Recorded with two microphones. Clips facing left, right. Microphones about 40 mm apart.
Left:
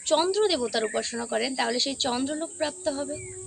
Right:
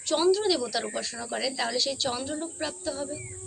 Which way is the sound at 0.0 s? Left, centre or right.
Left.